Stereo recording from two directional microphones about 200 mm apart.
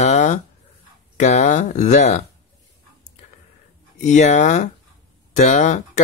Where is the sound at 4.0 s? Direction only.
35° left (ahead or behind).